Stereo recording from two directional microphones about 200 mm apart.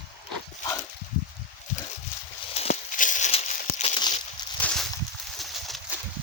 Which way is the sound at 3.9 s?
20° left (ahead or behind).